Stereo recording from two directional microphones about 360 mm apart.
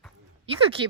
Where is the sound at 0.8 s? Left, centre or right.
Centre.